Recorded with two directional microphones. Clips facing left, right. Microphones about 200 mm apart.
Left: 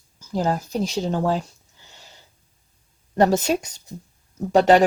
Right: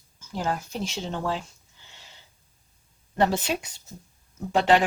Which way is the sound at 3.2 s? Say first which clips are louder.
Left 6 dB; 40° left (ahead or behind).